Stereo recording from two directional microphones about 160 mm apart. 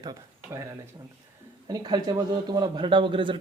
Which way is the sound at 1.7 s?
25° right (ahead or behind).